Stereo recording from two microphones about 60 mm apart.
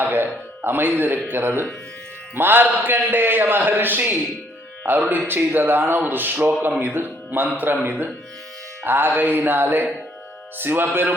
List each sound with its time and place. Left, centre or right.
0.0 s a man's voice: right